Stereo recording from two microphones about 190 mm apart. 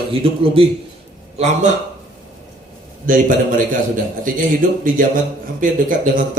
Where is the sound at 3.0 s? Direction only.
45° right (ahead or behind).